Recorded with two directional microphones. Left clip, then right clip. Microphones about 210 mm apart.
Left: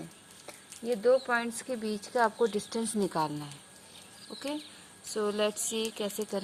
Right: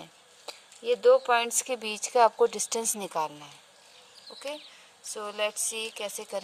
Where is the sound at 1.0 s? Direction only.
35° right (ahead or behind).